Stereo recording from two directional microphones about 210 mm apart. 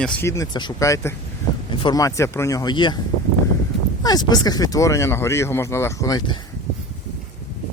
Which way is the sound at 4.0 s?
20° left (ahead or behind).